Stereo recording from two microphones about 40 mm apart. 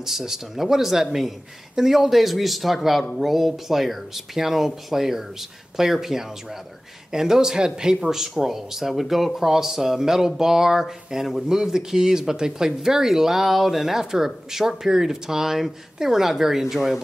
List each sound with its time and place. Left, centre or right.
0.0 s speech: centre
8.2 s speech: centre